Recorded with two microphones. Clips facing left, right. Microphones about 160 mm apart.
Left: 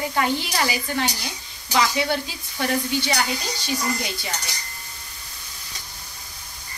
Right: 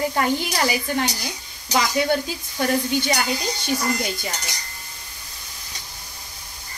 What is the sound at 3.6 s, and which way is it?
Speech, 50° right (ahead or behind).